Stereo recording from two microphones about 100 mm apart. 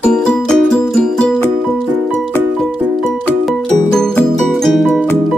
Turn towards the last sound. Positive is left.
turn(degrees=0)  # may be behind; listen again after turning